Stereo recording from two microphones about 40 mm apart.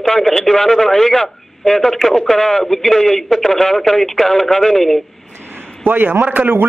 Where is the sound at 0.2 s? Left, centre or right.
Centre.